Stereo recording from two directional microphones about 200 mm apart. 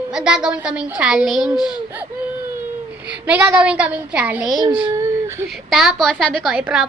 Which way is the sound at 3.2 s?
10° right (ahead or behind).